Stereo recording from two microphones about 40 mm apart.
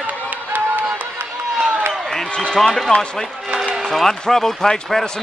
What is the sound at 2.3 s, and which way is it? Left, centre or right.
A man's voice, centre.